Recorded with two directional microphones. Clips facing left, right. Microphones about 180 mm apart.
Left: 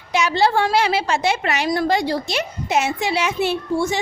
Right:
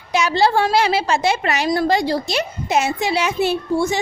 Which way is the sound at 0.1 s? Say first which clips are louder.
Right 1 dB; 40° right (ahead or behind).